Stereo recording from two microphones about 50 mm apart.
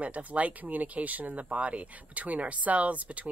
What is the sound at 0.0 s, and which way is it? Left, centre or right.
Speech, right.